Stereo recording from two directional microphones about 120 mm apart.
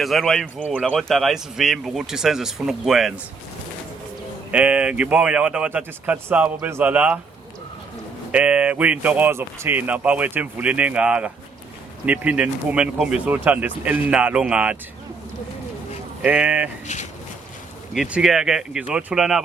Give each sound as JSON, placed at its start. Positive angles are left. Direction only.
{"t": 0.0, "sound": "speech", "side_deg": 0}
{"t": 4.5, "sound": "speech", "side_deg": -10}
{"t": 8.3, "sound": "speech", "side_deg": -10}
{"t": 16.2, "sound": "speech", "side_deg": -10}
{"t": 16.8, "sound": "speech", "side_deg": 75}
{"t": 17.9, "sound": "speech", "side_deg": -5}